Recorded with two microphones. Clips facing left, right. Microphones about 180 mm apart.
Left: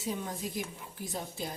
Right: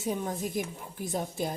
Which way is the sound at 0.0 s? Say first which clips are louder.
Right 4 dB; 50° right (ahead or behind).